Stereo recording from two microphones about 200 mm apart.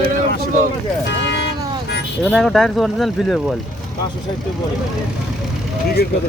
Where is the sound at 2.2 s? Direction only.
Centre (ahead or behind).